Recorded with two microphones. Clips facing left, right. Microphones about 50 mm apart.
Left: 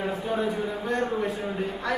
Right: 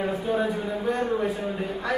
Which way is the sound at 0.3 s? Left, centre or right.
Centre.